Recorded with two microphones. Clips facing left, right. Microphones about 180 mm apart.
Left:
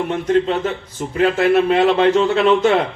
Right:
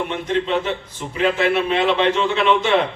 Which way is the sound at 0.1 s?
40° left (ahead or behind).